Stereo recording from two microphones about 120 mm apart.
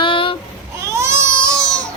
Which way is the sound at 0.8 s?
25° right (ahead or behind).